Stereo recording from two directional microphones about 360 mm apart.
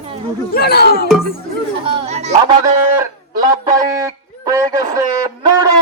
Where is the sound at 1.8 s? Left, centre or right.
Centre.